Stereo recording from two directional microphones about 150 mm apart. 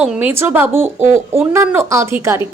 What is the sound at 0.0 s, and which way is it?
A woman's voice, 10° right (ahead or behind).